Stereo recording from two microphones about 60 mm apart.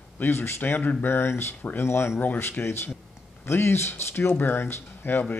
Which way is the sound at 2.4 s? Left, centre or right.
Left.